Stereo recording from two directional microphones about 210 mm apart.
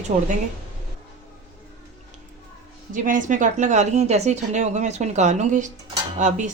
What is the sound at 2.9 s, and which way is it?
A woman's voice, 40° right (ahead or behind).